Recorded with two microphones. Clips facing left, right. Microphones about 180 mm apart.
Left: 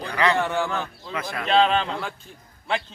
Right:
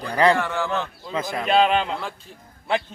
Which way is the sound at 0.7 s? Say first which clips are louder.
Right 3 dB; 20° right (ahead or behind).